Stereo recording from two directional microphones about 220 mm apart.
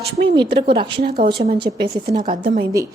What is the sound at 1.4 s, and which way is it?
Speech, 25° right (ahead or behind).